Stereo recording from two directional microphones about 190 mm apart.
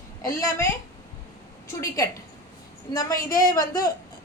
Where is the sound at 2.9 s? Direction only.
20° left (ahead or behind).